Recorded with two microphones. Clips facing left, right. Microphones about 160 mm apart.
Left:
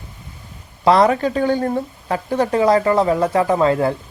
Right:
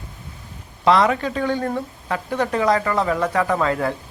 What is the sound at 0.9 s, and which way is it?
Speech, 35° left (ahead or behind).